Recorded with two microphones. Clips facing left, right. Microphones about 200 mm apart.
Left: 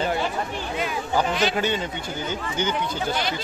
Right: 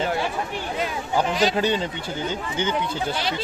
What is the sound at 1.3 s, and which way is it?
Speech, 35° right (ahead or behind).